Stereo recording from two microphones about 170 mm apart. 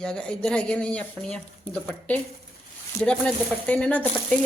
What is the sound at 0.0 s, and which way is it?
Speech, 5° left (ahead or behind).